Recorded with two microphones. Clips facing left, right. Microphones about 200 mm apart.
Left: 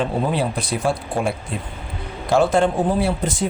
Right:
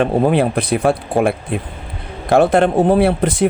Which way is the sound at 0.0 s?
60° right (ahead or behind).